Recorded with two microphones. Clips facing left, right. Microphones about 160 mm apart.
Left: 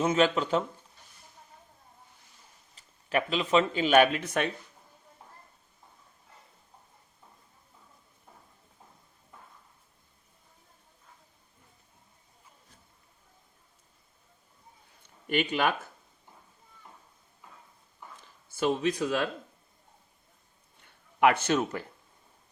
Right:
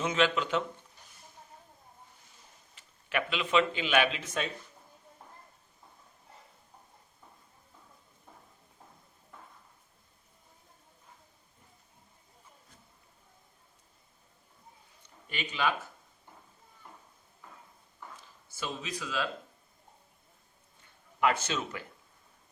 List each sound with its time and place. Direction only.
0.0 s speech: 40° left (ahead or behind)
2.7 s speech: 35° left (ahead or behind); by 4.4 s 55° left (ahead or behind)
15.3 s speech: 55° left (ahead or behind)
18.4 s speech: 55° left (ahead or behind)
21.2 s speech: 60° left (ahead or behind)